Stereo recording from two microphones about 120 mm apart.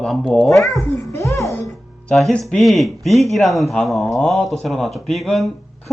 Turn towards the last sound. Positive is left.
turn(degrees=0)  # may be behind; listen again after turning